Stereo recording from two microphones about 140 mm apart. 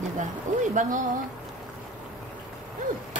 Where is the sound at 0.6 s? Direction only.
65° right (ahead or behind).